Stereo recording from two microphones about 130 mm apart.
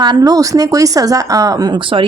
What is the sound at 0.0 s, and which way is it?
Speech, 30° right (ahead or behind).